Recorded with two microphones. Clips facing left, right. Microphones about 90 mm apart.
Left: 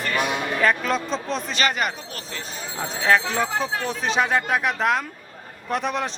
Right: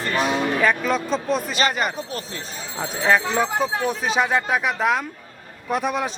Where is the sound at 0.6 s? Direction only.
Centre (ahead or behind).